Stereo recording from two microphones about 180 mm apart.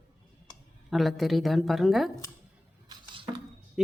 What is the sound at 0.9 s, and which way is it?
A woman's voice, centre (ahead or behind).